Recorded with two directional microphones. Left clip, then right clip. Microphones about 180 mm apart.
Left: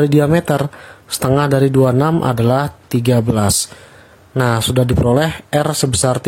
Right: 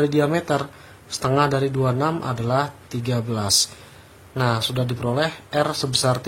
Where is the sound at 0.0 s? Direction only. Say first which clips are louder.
Left 6 dB; 60° left (ahead or behind).